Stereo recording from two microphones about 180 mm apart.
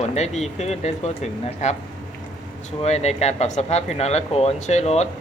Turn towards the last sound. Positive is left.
turn(degrees=40)  # may be behind; listen again after turning